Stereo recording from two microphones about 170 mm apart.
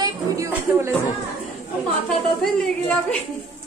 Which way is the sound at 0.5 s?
15° right (ahead or behind).